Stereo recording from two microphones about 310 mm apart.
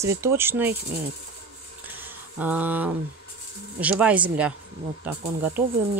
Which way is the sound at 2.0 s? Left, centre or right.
Centre.